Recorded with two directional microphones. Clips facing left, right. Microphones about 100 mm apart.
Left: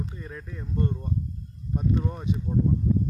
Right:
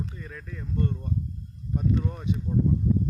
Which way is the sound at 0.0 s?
25° left (ahead or behind).